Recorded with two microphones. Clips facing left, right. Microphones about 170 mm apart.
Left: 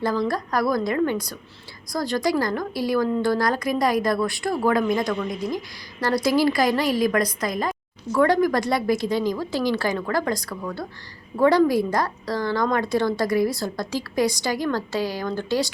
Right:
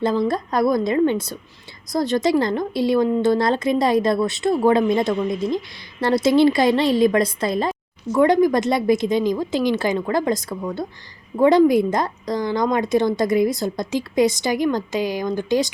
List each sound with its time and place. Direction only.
0.0 s speech: 20° right (ahead or behind)